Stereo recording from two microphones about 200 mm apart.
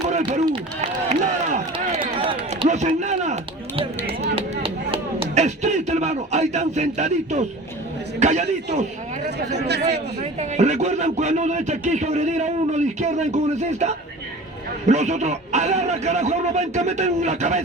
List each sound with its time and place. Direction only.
0.1 s run: 35° right (ahead or behind)
0.8 s a sound: 35° right (ahead or behind)
2.1 s run: 30° right (ahead or behind)
3.8 s a sound: 25° right (ahead or behind)
8.2 s speech: 35° right (ahead or behind)
9.6 s speech: 55° right (ahead or behind)
10.4 s speech: 35° right (ahead or behind)